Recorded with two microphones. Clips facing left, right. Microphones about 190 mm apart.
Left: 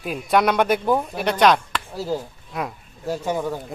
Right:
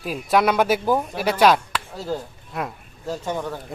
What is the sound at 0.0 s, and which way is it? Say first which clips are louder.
Speech: even; centre (ahead or behind).